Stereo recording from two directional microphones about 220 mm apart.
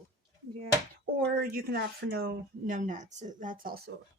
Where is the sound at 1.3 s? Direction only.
40° right (ahead or behind).